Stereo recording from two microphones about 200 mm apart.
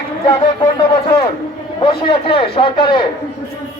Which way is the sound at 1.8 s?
25° left (ahead or behind).